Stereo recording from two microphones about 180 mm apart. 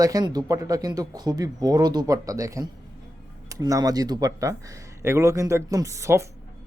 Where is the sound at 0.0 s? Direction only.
20° right (ahead or behind).